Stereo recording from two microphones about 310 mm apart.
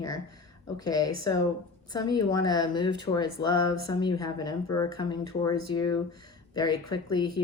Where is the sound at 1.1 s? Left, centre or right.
Left.